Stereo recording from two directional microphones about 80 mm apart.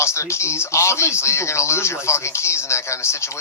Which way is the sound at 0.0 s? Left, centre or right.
Left.